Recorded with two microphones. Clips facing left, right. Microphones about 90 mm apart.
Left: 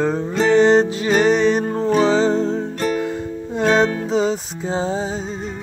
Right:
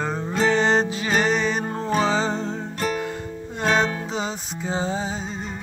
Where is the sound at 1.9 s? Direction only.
Centre (ahead or behind).